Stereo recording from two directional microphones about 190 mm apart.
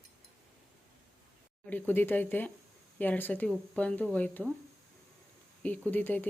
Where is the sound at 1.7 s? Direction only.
10° left (ahead or behind).